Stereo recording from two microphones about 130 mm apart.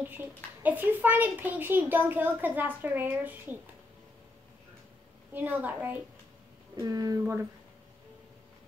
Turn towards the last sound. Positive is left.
turn(degrees=-25)  # may be behind; listen again after turning